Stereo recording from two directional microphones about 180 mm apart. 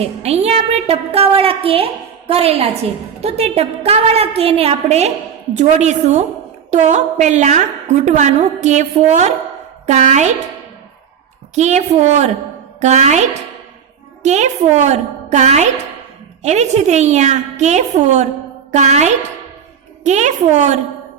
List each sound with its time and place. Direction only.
0.0 s a woman's voice: 35° right (ahead or behind)
11.5 s a woman's voice: 40° right (ahead or behind)